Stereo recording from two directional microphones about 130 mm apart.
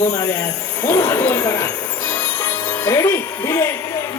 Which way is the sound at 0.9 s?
30° left (ahead or behind).